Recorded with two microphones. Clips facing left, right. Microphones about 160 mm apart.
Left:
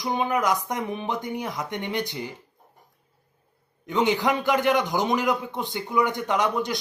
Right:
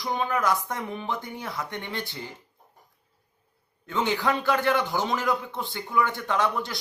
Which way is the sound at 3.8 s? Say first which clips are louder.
Left 3 dB; 15° left (ahead or behind).